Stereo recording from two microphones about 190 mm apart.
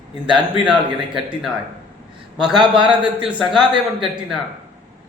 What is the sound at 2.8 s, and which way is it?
Speech, 5° right (ahead or behind).